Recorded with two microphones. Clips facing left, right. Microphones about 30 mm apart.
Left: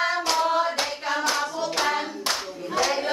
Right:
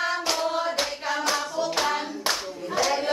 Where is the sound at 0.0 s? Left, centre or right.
Centre.